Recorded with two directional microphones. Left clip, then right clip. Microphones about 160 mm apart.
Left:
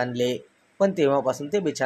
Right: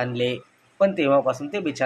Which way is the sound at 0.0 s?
50° left (ahead or behind).